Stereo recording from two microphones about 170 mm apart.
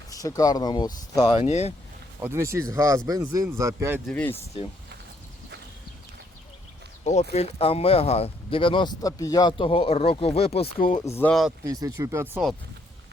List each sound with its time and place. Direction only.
0.1 s speech: 20° left (ahead or behind); by 1.7 s 40° left (ahead or behind)
2.2 s speech: 15° right (ahead or behind)
4.1 s speech: 10° left (ahead or behind)
7.0 s speech: 45° left (ahead or behind)
10.8 s speech: 50° left (ahead or behind)
11.0 s speech: 15° left (ahead or behind)
11.6 s speech: 20° right (ahead or behind)